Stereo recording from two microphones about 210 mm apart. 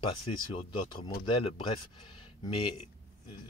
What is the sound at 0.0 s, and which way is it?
Speech, 25° left (ahead or behind).